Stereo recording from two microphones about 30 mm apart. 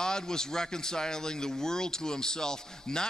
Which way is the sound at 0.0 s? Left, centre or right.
Left.